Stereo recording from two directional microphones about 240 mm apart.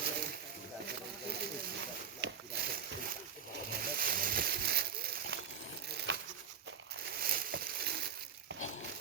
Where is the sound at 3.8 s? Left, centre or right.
Right.